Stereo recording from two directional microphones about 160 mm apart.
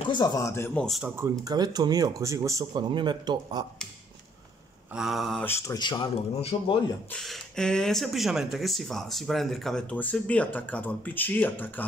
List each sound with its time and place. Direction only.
0.1 s speech: 25° left (ahead or behind)
0.8 s speech: centre (ahead or behind)
1.1 s speech: 20° right (ahead or behind)
4.9 s speech: centre (ahead or behind)
5.4 s speech: 15° left (ahead or behind)
5.8 s speech: 30° left (ahead or behind)
7.1 s speech: 5° left (ahead or behind)